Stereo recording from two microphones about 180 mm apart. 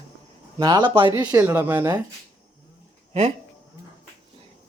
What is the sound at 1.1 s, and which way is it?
Speech, 15° right (ahead or behind).